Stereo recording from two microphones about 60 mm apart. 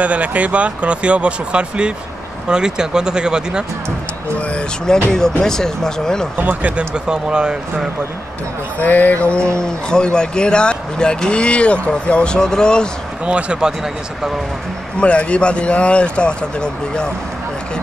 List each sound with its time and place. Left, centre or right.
0.0 s speech: right
4.4 s speech: centre
6.3 s speech: right
7.1 s speech: centre
8.7 s speech: left; by 12.9 s centre
13.2 s speech: centre
15.0 s speech: centre